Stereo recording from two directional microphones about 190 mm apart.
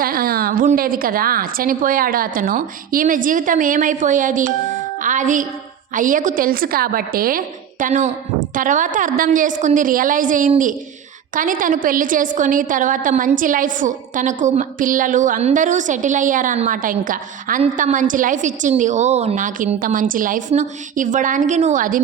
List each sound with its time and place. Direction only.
0.0 s a woman's voice: 50° right (ahead or behind)